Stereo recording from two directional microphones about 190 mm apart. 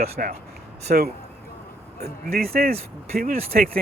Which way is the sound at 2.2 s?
50° right (ahead or behind).